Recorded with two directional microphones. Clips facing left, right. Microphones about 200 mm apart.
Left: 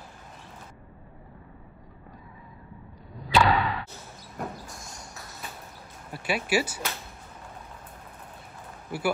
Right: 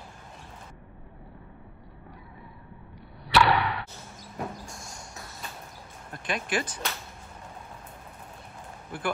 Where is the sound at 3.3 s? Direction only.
70° right (ahead or behind).